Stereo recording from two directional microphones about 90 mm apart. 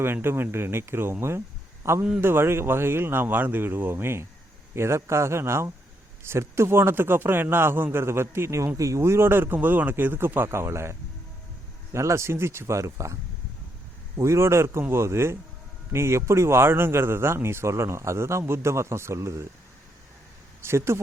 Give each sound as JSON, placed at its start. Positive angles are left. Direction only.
{"t": 0.0, "sound": "a man's voice", "side_deg": -25}
{"t": 11.9, "sound": "speech", "side_deg": -30}
{"t": 14.2, "sound": "a man's voice", "side_deg": -30}
{"t": 20.7, "sound": "a man's voice", "side_deg": -30}